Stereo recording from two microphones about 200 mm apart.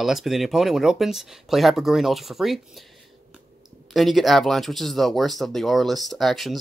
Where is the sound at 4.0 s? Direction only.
Centre (ahead or behind).